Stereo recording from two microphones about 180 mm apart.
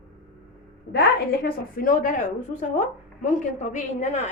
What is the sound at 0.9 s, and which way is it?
A woman's voice, 55° left (ahead or behind).